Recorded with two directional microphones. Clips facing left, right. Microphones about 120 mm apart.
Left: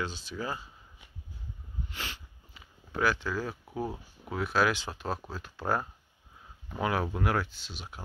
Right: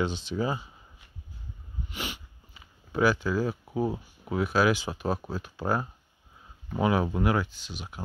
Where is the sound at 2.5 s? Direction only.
5° right (ahead or behind).